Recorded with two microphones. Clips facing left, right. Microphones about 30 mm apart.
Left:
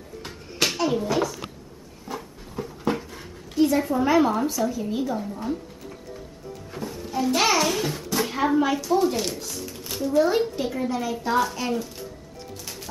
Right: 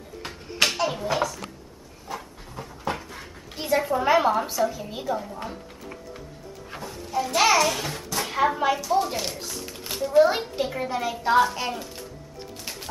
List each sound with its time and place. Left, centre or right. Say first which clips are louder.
0.7 s a sound: left 2 dB; centre
2.1 s dog: left 4 dB; centre
3.5 s a woman's voice: left 3 dB; right
6.8 s a child's voice: left 1 dB; centre
10.1 s a woman's voice: right 2 dB; centre